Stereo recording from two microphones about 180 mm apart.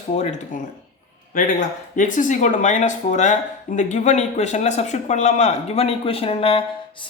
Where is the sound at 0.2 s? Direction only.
40° left (ahead or behind).